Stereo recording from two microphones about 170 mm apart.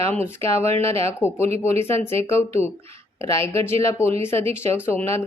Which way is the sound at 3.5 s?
15° left (ahead or behind).